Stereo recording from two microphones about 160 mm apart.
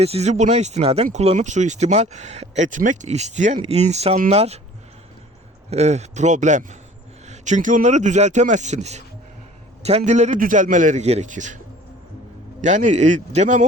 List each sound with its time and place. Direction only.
0.0 s speech: 40° right (ahead or behind)
5.7 s speech: 45° right (ahead or behind)
12.6 s speech: 50° right (ahead or behind)